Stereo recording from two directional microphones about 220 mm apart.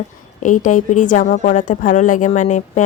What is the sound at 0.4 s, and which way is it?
Speech, 35° left (ahead or behind).